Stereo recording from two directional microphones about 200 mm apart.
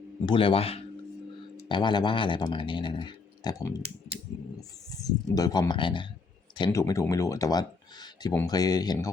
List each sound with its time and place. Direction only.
0.3 s speech: 25° left (ahead or behind)
4.9 s speech: 20° left (ahead or behind)